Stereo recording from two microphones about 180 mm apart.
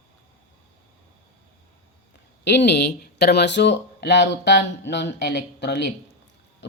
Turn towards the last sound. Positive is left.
turn(degrees=75)  # may be behind; listen again after turning